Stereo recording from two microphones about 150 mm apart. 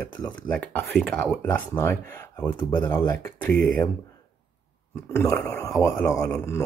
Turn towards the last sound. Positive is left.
turn(degrees=15)  # may be behind; listen again after turning